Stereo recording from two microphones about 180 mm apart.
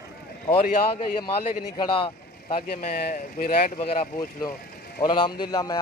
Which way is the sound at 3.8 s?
35° left (ahead or behind).